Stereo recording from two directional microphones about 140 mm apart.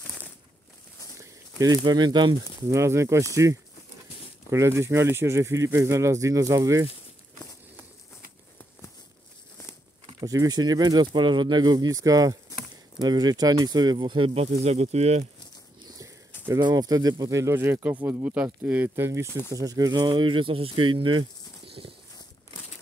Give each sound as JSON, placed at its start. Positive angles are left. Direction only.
{"t": 0.0, "sound": "a sound", "side_deg": 15}
{"t": 1.6, "sound": "speech", "side_deg": -30}
{"t": 2.8, "sound": "speech", "side_deg": -20}
{"t": 4.5, "sound": "speech", "side_deg": -20}
{"t": 10.2, "sound": "speech", "side_deg": -25}
{"t": 16.6, "sound": "speech", "side_deg": -30}